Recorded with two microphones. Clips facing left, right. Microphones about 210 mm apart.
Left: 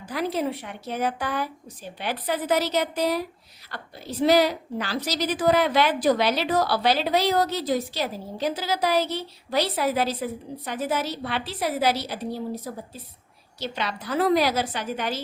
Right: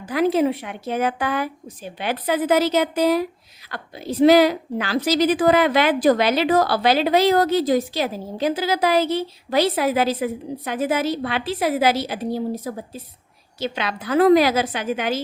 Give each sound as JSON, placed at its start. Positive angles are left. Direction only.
{"t": 0.0, "sound": "a woman's voice", "side_deg": -90}
{"t": 6.6, "sound": "a woman's voice", "side_deg": -50}
{"t": 6.8, "sound": "a woman's voice", "side_deg": -90}
{"t": 14.1, "sound": "a woman's voice", "side_deg": -50}
{"t": 14.3, "sound": "a woman's voice", "side_deg": -90}